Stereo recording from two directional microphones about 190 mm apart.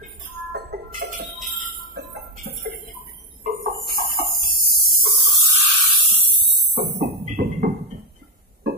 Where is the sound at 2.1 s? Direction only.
60° right (ahead or behind).